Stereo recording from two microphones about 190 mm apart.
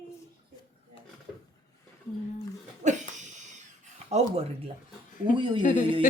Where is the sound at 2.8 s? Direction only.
40° right (ahead or behind).